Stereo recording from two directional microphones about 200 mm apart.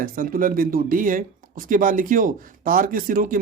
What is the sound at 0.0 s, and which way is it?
Speech, 45° right (ahead or behind).